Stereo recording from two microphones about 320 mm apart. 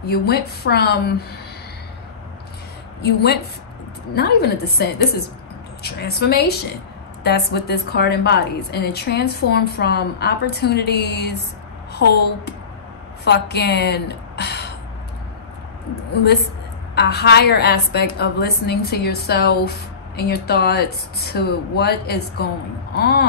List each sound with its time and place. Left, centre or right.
0.0 s speech: left
3.0 s a woman's voice: left
13.2 s a woman's voice: left
16.9 s a woman's voice: left